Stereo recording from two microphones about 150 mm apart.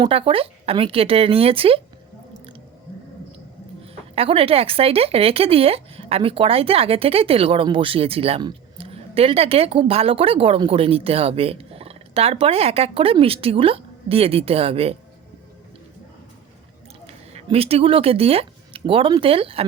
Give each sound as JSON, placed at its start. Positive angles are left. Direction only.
{"t": 0.0, "sound": "speech", "side_deg": -40}
{"t": 4.1, "sound": "speech", "side_deg": -40}
{"t": 17.3, "sound": "speech", "side_deg": -40}